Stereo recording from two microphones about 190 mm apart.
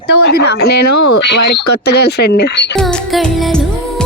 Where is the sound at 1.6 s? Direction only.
60° left (ahead or behind).